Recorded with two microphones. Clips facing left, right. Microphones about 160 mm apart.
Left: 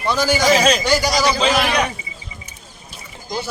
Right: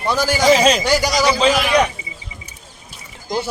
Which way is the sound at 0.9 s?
15° right (ahead or behind).